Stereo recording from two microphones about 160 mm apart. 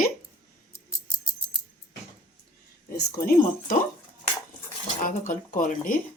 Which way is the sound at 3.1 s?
65° left (ahead or behind).